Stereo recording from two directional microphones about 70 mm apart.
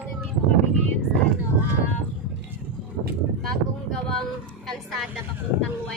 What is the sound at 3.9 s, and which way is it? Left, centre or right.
Vehicle, centre.